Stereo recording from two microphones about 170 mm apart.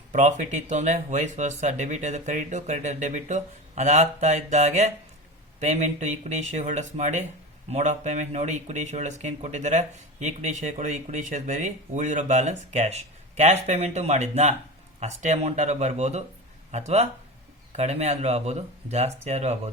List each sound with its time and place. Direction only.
0.1 s speech: 45° right (ahead or behind)